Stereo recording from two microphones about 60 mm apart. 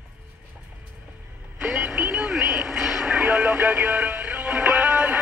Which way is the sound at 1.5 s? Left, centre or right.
Centre.